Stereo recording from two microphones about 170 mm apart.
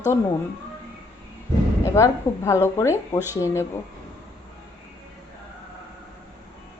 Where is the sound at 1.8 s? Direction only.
15° left (ahead or behind).